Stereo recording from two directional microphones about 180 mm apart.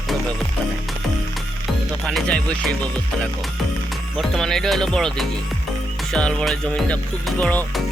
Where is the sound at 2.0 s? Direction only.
5° left (ahead or behind).